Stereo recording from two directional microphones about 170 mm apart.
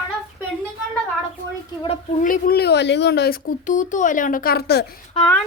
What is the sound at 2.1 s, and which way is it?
Speech, 50° left (ahead or behind).